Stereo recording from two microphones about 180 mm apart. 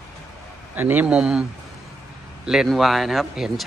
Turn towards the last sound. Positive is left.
turn(degrees=0)  # may be behind; listen again after turning